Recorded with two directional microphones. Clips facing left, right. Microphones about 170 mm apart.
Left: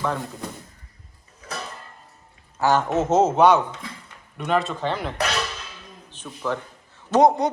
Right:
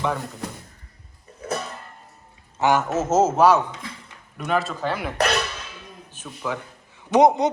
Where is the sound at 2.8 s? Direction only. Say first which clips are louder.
Left 1 dB; centre (ahead or behind).